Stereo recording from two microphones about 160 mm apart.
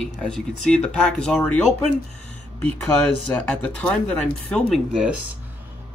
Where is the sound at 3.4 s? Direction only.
5° left (ahead or behind).